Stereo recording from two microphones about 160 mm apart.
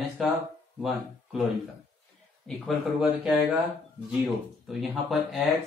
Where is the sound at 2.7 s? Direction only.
Centre (ahead or behind).